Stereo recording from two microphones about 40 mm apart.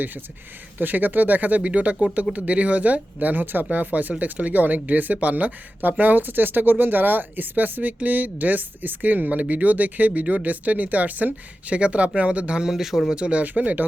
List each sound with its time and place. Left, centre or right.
0.8 s speech: right
3.4 s speech: right
11.7 s speech: right
12.6 s speech: centre
13.1 s speech: right